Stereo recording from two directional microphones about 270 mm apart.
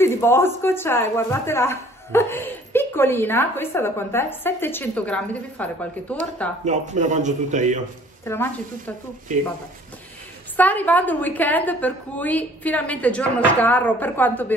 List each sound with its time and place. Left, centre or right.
0.0 s a woman's voice: centre
6.6 s a man's voice: right
8.3 s a woman's voice: centre
9.3 s a man's voice: right
10.5 s a woman's voice: centre